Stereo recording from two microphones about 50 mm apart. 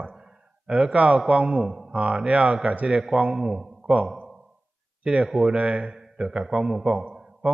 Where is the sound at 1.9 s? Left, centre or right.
Right.